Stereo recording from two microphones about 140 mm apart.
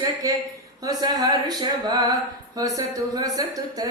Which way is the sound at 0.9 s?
30° right (ahead or behind).